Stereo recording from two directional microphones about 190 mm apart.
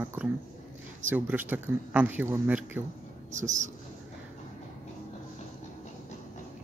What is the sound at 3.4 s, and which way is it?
Speech, 40° right (ahead or behind).